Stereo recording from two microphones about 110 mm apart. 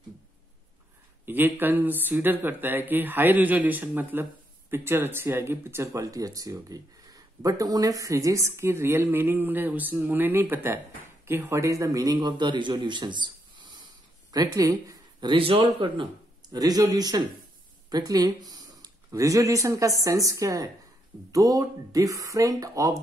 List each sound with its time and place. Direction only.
1.2 s a man's voice: 20° right (ahead or behind); by 16.1 s 55° right (ahead or behind)
16.5 s speech: 35° right (ahead or behind)